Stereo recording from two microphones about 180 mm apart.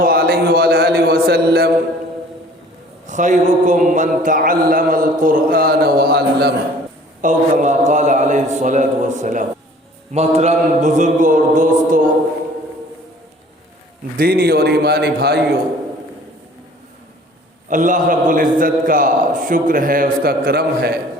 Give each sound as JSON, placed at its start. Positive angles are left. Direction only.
{"t": 0.0, "sound": "a sound", "side_deg": -55}
{"t": 3.1, "sound": "a man's voice", "side_deg": -45}
{"t": 7.2, "sound": "a man's voice", "side_deg": -45}
{"t": 14.2, "sound": "a man's voice", "side_deg": -60}
{"t": 17.7, "sound": "a man's voice", "side_deg": -45}